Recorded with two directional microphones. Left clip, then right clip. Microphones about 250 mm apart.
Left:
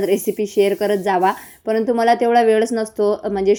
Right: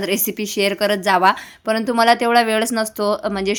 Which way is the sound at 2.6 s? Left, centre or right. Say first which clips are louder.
Left 2 dB; centre.